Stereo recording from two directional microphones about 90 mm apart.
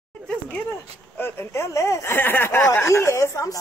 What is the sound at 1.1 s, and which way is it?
Speech, 25° left (ahead or behind).